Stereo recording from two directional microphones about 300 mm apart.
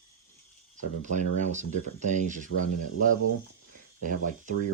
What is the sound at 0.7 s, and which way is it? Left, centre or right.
Speech, right.